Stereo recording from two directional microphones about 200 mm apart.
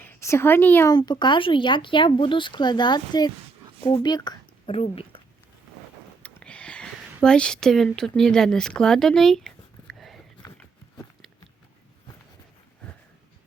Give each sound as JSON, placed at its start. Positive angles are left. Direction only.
{"t": 0.0, "sound": "a woman's voice", "side_deg": 10}
{"t": 6.2, "sound": "a sound", "side_deg": 5}
{"t": 10.4, "sound": "horse", "side_deg": 15}